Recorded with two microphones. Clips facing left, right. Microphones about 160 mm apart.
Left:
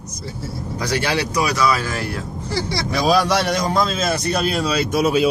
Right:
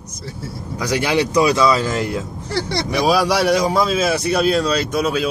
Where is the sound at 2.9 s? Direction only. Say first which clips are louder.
Even; 10° right (ahead or behind).